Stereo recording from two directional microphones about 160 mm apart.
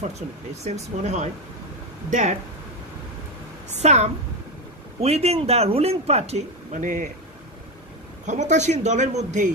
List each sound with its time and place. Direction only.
0.7 s speech: 45° right (ahead or behind)
3.7 s speech: 45° right (ahead or behind)
8.3 s speech: 50° right (ahead or behind)